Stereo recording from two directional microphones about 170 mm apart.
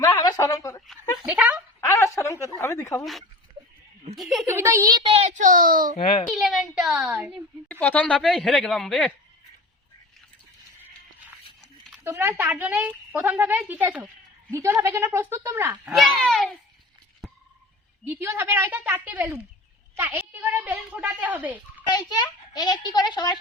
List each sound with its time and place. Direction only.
0.1 s a sound: 25° left (ahead or behind)
1.2 s a sound: 10° right (ahead or behind)
1.9 s a sound: 15° left (ahead or behind)
2.6 s speech: 15° left (ahead or behind)
3.0 s speech: centre (ahead or behind)
4.4 s a woman's voice: 15° right (ahead or behind)
5.1 s a child's voice: 45° right (ahead or behind)
6.2 s speech: centre (ahead or behind)
7.7 s speech: 10° left (ahead or behind)
12.0 s a woman's voice: 15° right (ahead or behind)
16.0 s speech: centre (ahead or behind)
17.2 s frog: centre (ahead or behind)
18.0 s a woman's voice: 15° right (ahead or behind)
21.8 s a child's voice: 25° left (ahead or behind)